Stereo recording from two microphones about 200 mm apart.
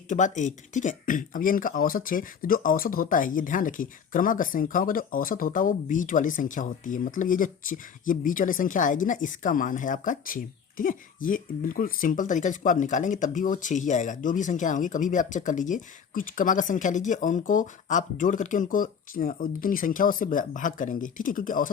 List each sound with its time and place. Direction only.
0.1 s speech: 40° left (ahead or behind)